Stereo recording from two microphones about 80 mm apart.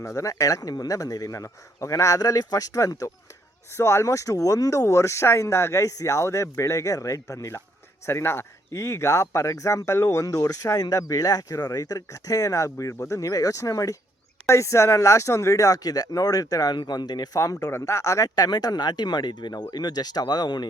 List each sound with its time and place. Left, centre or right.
0.0 s speech: left
3.8 s speech: left
16.7 s speech: left